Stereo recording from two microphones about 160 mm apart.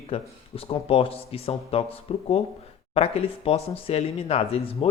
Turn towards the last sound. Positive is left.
turn(degrees=40)  # may be behind; listen again after turning